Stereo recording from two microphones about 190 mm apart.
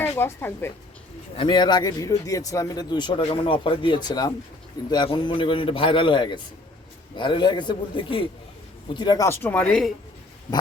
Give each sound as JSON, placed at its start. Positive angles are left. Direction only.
{"t": 0.0, "sound": "a woman's voice", "side_deg": 15}
{"t": 1.4, "sound": "speech", "side_deg": 25}